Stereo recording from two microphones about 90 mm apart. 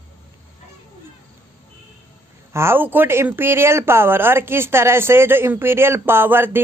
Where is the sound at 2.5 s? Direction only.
30° right (ahead or behind).